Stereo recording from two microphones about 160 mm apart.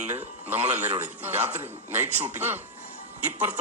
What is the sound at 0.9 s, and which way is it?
Speech, 40° right (ahead or behind).